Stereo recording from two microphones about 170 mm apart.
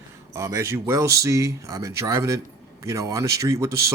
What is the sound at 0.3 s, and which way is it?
Speech, 15° right (ahead or behind).